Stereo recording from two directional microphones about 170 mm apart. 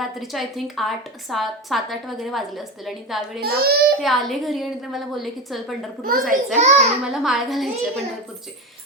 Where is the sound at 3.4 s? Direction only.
65° right (ahead or behind).